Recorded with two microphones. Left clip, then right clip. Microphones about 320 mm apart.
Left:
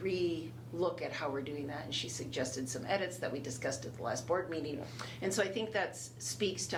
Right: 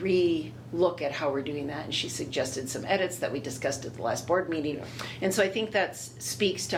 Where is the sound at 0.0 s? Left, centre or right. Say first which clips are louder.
Right 10 dB; right.